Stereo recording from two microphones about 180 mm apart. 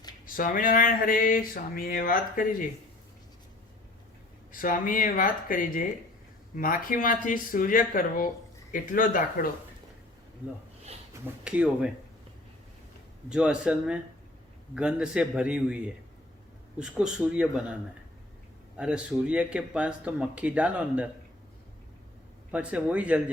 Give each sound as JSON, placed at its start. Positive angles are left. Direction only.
{"t": 0.3, "sound": "speech", "side_deg": 50}
{"t": 4.5, "sound": "speech", "side_deg": 50}
{"t": 11.4, "sound": "speech", "side_deg": -5}
{"t": 13.3, "sound": "a man's voice", "side_deg": -5}
{"t": 18.8, "sound": "speech", "side_deg": -5}
{"t": 22.5, "sound": "speech", "side_deg": -5}